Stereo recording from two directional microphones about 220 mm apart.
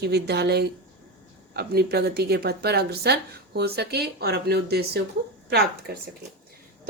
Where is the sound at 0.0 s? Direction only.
50° right (ahead or behind).